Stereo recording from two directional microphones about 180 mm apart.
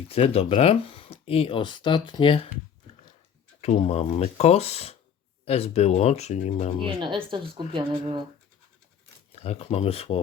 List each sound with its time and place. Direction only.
0.1 s speech: 35° left (ahead or behind)
3.6 s speech: 35° left (ahead or behind)
6.8 s speech: 25° right (ahead or behind)
9.3 s speech: 35° left (ahead or behind)